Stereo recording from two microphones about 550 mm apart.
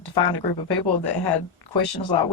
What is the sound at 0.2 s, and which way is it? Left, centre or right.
Speech, left.